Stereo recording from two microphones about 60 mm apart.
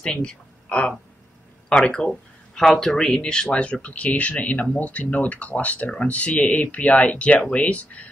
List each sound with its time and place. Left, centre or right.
0.0 s speech: centre